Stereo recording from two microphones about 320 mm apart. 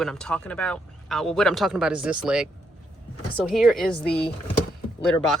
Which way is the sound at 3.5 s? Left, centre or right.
Centre.